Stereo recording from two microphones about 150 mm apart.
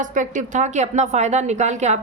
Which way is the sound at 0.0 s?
60° right (ahead or behind).